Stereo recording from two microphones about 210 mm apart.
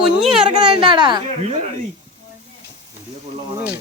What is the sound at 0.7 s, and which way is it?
Speech, 20° right (ahead or behind).